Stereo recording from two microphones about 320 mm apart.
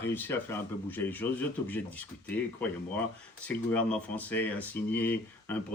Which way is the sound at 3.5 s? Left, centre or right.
Centre.